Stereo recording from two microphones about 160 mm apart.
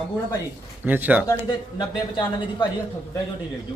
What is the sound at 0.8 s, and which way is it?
Speech, 10° right (ahead or behind).